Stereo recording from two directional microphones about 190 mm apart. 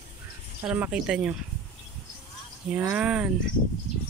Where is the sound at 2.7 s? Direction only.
5° right (ahead or behind).